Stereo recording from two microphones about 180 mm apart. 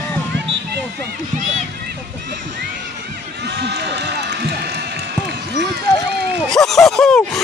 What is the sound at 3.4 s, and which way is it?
Run, 70° right (ahead or behind).